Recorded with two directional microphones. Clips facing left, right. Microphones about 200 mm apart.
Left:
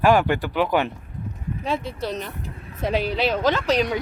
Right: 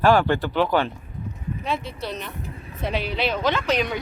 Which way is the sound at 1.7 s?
45° left (ahead or behind).